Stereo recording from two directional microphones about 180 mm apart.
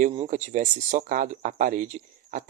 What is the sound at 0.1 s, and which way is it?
Speech, 40° right (ahead or behind).